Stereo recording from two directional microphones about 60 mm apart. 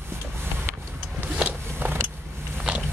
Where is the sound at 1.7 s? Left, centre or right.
Right.